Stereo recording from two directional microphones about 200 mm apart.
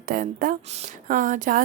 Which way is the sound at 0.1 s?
45° right (ahead or behind).